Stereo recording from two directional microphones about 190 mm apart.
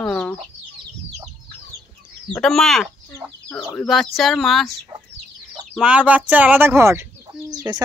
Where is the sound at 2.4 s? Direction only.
Centre (ahead or behind).